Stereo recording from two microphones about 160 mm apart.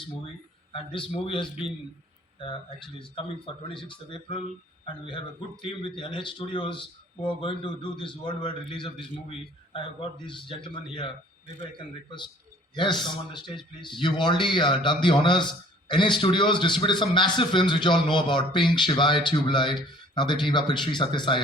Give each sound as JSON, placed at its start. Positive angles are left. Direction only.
{"t": 0.7, "sound": "a man's voice", "side_deg": 35}
{"t": 5.6, "sound": "a man's voice", "side_deg": 30}
{"t": 12.7, "sound": "a man's voice", "side_deg": 30}